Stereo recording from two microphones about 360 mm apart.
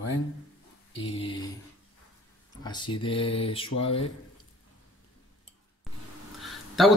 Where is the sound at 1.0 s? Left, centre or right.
Centre.